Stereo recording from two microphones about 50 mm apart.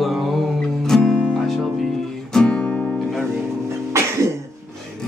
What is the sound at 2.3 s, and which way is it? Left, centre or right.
Music, centre.